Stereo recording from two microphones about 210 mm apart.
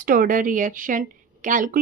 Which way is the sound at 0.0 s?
40° right (ahead or behind).